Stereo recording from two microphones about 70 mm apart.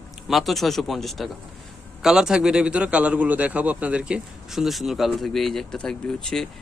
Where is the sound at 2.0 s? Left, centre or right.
Centre.